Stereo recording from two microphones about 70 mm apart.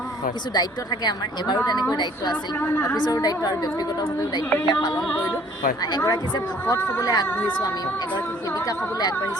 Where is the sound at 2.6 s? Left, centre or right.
Left.